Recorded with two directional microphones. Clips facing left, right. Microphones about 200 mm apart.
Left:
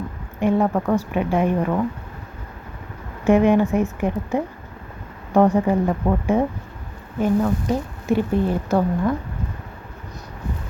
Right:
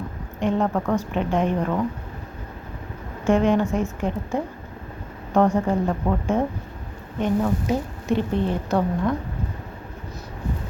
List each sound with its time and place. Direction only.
0.4 s speech: 10° left (ahead or behind)
3.2 s speech: 15° left (ahead or behind)
5.5 s speech: 15° left (ahead or behind)
7.2 s speech: centre (ahead or behind)